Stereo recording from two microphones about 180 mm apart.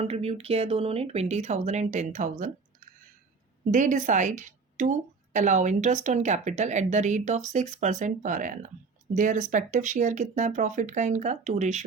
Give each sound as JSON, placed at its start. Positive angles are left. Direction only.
{"t": 0.0, "sound": "speech", "side_deg": -35}
{"t": 3.7, "sound": "a woman's voice", "side_deg": -45}